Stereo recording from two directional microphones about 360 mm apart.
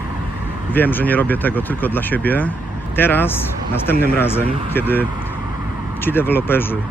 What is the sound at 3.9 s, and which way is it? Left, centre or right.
Speech, left.